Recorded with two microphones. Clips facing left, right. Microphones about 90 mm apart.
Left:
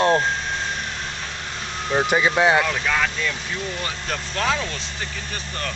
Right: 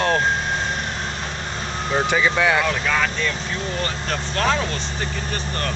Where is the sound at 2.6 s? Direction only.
Centre (ahead or behind).